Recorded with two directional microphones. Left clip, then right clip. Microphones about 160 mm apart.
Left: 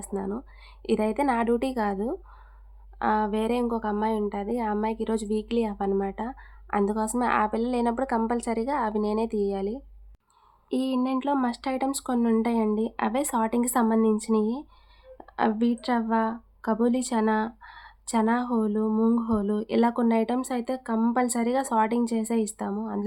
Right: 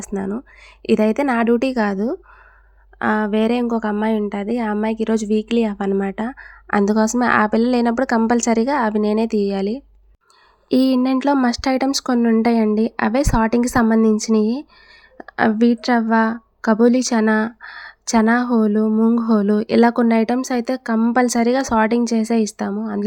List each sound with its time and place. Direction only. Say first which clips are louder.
0.0 s a woman's voice: right 6 dB; 35° right (ahead or behind)
10.7 s a woman's voice: right 10 dB; 50° right (ahead or behind); by 23.0 s 35° right (ahead or behind)